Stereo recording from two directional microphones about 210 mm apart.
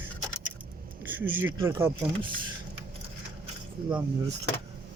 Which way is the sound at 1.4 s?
15° right (ahead or behind).